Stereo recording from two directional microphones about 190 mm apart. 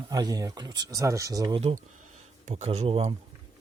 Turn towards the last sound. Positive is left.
turn(degrees=-30)  # may be behind; listen again after turning